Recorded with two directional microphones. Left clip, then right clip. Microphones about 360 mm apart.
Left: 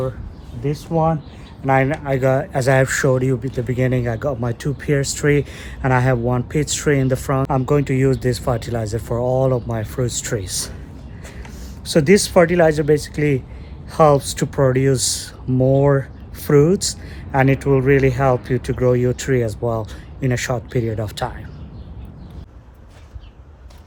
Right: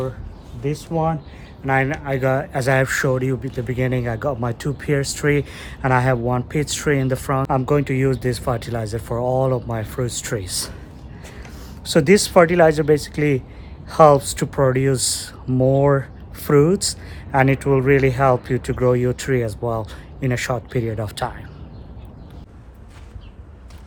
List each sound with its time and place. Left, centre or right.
0.6 s speech: centre
11.9 s speech: centre